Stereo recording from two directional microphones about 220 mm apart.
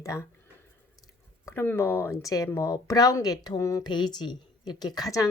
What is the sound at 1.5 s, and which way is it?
Speech, 10° left (ahead or behind).